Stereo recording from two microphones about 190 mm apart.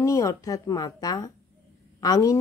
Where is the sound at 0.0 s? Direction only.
15° left (ahead or behind).